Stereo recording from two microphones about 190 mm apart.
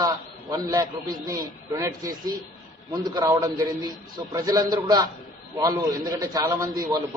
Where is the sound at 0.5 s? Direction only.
20° right (ahead or behind).